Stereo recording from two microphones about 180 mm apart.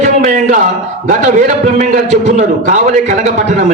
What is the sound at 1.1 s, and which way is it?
A man's voice, 45° right (ahead or behind).